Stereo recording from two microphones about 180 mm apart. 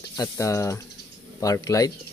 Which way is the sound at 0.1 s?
15° left (ahead or behind).